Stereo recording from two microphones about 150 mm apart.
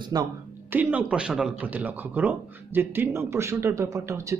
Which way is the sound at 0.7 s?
10° right (ahead or behind).